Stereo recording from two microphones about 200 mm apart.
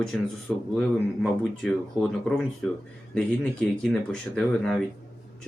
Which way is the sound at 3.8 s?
Centre (ahead or behind).